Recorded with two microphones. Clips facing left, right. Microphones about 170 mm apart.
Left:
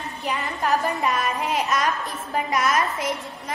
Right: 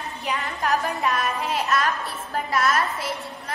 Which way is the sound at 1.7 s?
20° left (ahead or behind).